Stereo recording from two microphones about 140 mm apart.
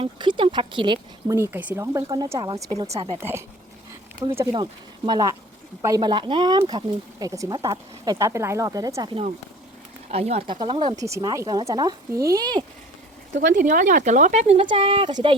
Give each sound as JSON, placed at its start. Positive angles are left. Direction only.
{"t": 0.0, "sound": "speech", "side_deg": -35}
{"t": 1.3, "sound": "speech", "side_deg": -15}
{"t": 3.2, "sound": "speech", "side_deg": -15}
{"t": 4.5, "sound": "speech", "side_deg": -30}
{"t": 10.1, "sound": "speech", "side_deg": -45}
{"t": 10.5, "sound": "speech", "side_deg": -30}
{"t": 13.3, "sound": "speech", "side_deg": -65}